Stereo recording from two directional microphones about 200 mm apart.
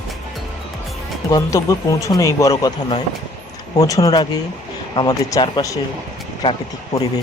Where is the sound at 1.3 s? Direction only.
15° left (ahead or behind).